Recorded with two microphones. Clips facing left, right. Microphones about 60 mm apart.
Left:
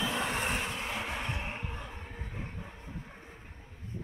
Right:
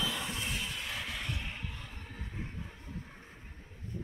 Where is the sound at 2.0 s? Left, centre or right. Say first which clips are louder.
Left 1 dB; left.